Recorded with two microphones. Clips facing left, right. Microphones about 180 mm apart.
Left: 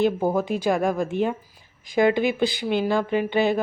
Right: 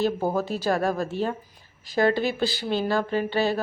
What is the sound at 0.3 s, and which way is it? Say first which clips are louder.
A woman's voice: left 2 dB; 15° left (ahead or behind).